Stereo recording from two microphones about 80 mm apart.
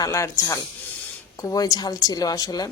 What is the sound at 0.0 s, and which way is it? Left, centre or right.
Speech, left.